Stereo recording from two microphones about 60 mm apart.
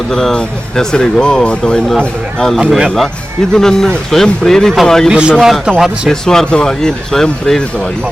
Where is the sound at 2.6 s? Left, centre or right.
Centre.